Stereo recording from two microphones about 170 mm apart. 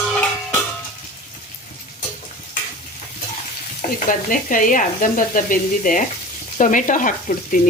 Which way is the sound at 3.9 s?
50° left (ahead or behind).